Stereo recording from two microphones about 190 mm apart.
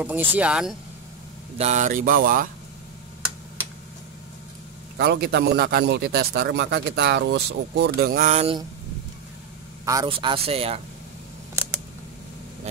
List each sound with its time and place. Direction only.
0.0 s speech: 10° right (ahead or behind)
1.6 s speech: 40° right (ahead or behind)
4.9 s a man's voice: 55° right (ahead or behind); by 8.5 s 35° right (ahead or behind)
9.8 s speech: 15° right (ahead or behind)
10.1 s speech: 30° right (ahead or behind)